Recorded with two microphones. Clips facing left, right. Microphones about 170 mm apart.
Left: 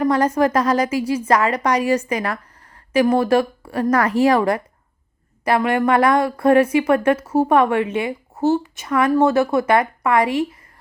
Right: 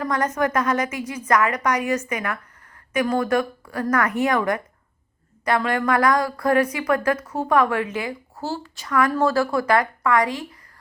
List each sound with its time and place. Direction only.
0.0 s a woman's voice: 30° left (ahead or behind)